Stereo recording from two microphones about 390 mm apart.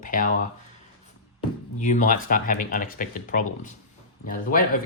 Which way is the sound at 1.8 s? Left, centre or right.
Centre.